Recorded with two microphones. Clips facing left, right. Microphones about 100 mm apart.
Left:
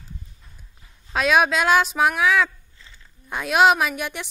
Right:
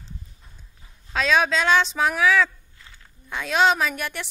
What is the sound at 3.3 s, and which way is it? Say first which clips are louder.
Speech: left 3 dB; 15° left (ahead or behind).